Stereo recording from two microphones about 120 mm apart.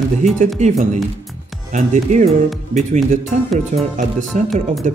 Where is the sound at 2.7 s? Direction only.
80° right.